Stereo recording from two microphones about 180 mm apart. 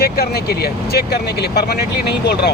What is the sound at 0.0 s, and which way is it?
Speech, 60° left (ahead or behind).